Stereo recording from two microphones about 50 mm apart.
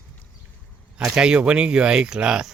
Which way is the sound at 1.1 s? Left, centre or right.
Centre.